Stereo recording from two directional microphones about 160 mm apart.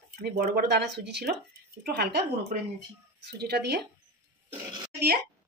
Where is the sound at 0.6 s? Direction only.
90° right.